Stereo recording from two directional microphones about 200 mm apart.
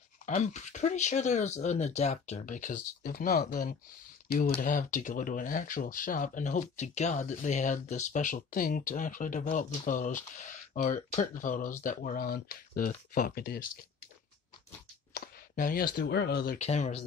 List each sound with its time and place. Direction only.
0.3 s speech: 35° left (ahead or behind)
15.1 s speech: 45° left (ahead or behind)
16.5 s speech: 35° left (ahead or behind)